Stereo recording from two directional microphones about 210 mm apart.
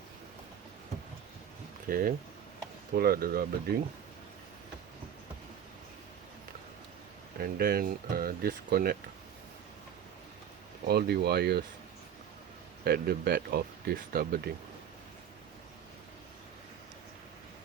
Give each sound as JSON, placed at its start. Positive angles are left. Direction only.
{"t": 1.9, "sound": "speech", "side_deg": -45}
{"t": 7.3, "sound": "speech", "side_deg": -45}
{"t": 10.8, "sound": "speech", "side_deg": -50}
{"t": 12.8, "sound": "speech", "side_deg": -45}